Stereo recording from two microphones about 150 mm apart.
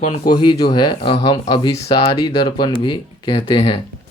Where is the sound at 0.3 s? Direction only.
30° left (ahead or behind).